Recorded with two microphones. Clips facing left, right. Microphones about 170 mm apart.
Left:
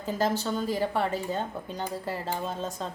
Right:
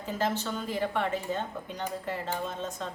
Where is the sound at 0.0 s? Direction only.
35° left (ahead or behind).